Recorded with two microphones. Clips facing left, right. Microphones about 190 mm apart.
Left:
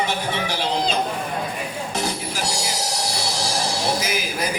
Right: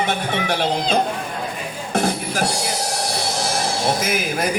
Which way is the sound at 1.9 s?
55° right (ahead or behind).